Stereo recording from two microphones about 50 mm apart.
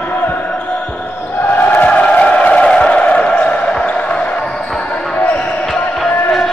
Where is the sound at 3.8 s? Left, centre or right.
Left.